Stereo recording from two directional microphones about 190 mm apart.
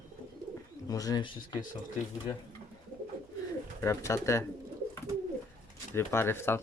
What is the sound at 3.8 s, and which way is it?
Speech, 15° left (ahead or behind).